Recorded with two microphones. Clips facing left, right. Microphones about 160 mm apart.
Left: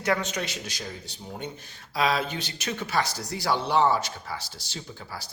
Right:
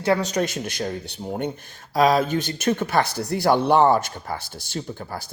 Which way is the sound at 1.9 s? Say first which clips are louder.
Right 8 dB; 45° right (ahead or behind).